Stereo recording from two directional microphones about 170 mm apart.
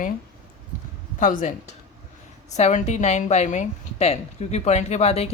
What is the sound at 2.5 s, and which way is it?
A woman's voice, 40° left (ahead or behind).